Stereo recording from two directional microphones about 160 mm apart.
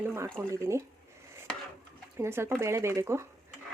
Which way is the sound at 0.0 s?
15° right (ahead or behind).